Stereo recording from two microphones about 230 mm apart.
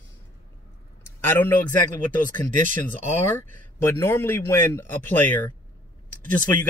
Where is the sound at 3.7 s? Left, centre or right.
Centre.